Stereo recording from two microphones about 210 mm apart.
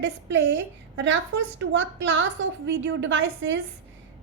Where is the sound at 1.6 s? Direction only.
60° right (ahead or behind).